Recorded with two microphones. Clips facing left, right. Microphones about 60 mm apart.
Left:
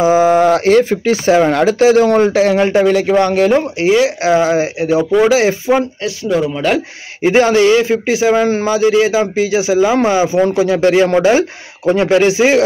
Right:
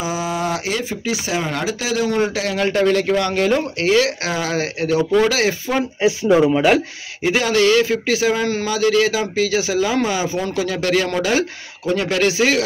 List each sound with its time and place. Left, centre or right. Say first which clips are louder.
0.0 s speech: left 13 dB; left
2.7 s a man's voice: left 5 dB; centre
6.0 s speech: right 2 dB; right
7.2 s a man's voice: left 6 dB; left